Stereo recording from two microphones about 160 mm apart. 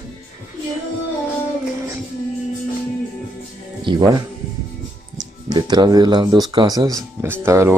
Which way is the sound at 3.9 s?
25° right (ahead or behind).